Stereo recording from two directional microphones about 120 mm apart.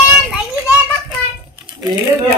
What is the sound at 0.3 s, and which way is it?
Children playing, 5° right (ahead or behind).